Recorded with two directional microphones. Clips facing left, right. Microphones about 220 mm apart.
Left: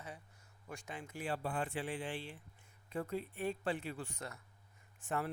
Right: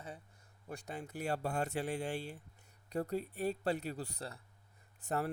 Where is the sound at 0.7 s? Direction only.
35° right (ahead or behind).